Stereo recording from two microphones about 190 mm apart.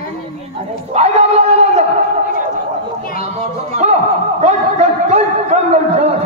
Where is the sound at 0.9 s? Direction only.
35° right (ahead or behind).